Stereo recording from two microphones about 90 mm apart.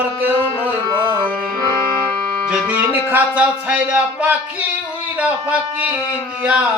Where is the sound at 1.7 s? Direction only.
35° left (ahead or behind).